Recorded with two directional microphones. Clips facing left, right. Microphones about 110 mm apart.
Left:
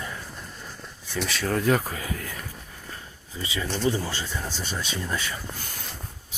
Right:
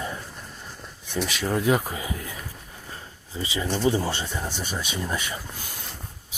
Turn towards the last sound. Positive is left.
turn(degrees=-20)  # may be behind; listen again after turning